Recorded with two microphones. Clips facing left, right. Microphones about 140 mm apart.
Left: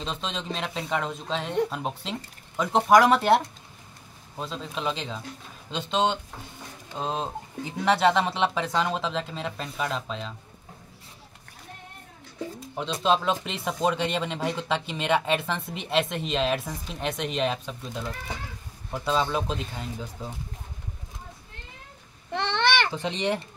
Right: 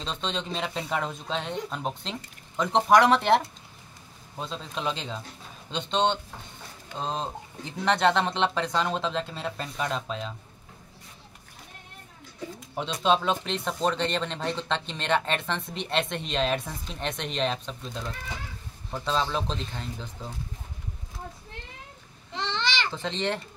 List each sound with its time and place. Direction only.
0.0 s speech: 5° left (ahead or behind)
13.0 s speech: centre (ahead or behind)
22.3 s a sound: 60° left (ahead or behind)
22.8 s speech: 15° left (ahead or behind)